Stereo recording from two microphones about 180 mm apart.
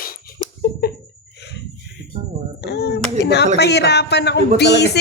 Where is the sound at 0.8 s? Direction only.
60° left (ahead or behind).